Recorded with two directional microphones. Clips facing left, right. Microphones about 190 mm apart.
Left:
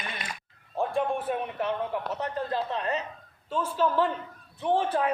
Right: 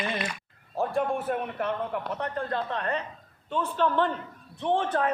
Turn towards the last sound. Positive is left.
turn(degrees=5)  # may be behind; listen again after turning